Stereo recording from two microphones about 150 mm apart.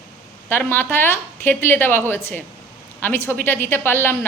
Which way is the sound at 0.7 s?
15° left (ahead or behind).